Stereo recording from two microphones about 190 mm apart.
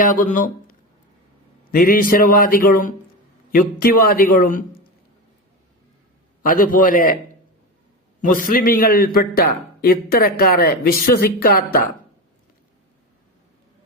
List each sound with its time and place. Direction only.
0.0 s a man's voice: 45° left (ahead or behind)
1.7 s a man's voice: 50° left (ahead or behind)
6.4 s a man's voice: 45° left (ahead or behind)
8.2 s a man's voice: 50° left (ahead or behind)